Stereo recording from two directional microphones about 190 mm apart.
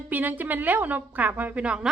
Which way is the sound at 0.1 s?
10° right (ahead or behind).